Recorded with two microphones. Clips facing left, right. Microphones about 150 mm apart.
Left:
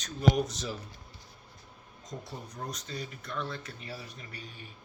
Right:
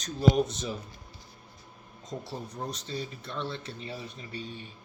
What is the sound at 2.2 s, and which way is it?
Speech, 30° right (ahead or behind).